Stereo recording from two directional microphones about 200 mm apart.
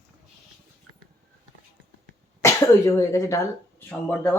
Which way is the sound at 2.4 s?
15° left (ahead or behind).